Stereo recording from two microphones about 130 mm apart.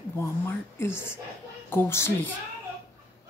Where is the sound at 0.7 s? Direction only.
20° left (ahead or behind).